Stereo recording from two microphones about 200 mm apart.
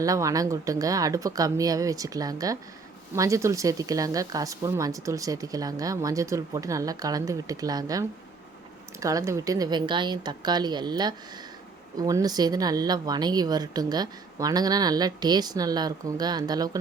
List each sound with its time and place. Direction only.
0.0 s speech: 15° right (ahead or behind)